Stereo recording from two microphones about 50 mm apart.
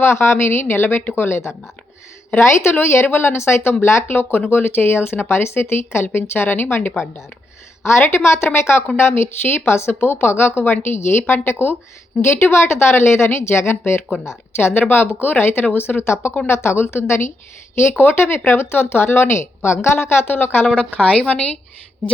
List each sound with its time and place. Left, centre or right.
0.0 s speech: left
2.3 s speech: left
4.1 s speech: left
7.9 s speech: left
12.3 s speech: left
16.0 s speech: left
16.5 s speech: left
17.7 s speech: left
21.0 s a woman's voice: left